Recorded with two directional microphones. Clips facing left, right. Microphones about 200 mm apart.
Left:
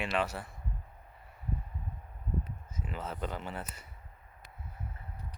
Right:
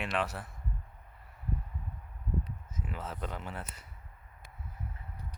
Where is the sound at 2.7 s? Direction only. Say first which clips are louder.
Left 1 dB; centre (ahead or behind).